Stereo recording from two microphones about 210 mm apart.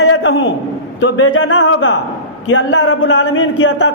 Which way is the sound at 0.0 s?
75° left (ahead or behind).